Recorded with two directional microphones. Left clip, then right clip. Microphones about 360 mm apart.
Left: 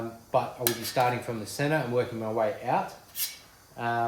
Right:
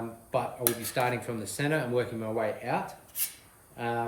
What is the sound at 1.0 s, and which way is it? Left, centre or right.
Speech, centre.